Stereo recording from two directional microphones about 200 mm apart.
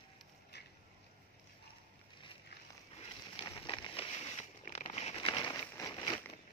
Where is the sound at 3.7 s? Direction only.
25° left (ahead or behind).